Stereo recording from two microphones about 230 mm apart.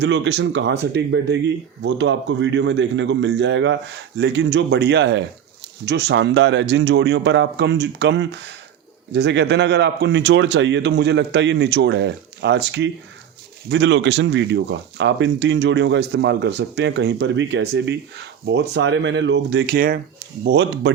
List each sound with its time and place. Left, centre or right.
0.0 s speech: right